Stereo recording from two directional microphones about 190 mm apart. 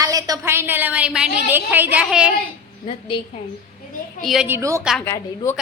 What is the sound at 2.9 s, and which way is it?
Speech, 25° left (ahead or behind).